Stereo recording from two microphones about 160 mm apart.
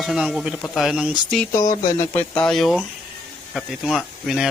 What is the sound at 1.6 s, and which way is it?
Speech, 55° left (ahead or behind).